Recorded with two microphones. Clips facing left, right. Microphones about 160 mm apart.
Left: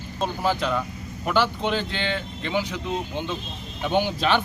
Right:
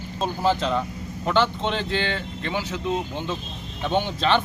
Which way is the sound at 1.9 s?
20° left (ahead or behind).